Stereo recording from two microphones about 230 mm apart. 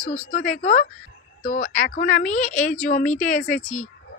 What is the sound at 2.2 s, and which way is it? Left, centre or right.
Speech, left.